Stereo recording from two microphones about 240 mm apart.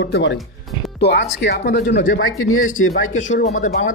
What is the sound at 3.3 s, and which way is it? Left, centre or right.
Speech, left.